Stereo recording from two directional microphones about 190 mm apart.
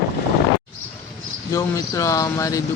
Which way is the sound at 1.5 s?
15° left (ahead or behind).